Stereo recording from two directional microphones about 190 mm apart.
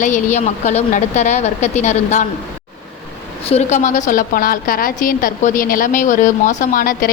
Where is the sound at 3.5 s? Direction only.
40° left (ahead or behind).